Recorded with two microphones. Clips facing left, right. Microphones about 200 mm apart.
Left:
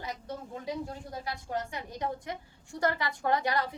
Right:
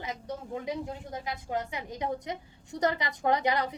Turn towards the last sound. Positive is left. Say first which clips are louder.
# right 2 dB
turn(degrees=-20)  # may be behind; listen again after turning